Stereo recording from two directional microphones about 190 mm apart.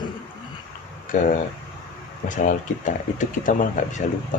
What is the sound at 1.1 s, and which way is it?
Speech, 45° left (ahead or behind).